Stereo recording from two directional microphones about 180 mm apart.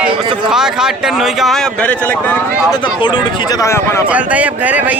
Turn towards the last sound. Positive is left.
turn(degrees=-10)  # may be behind; listen again after turning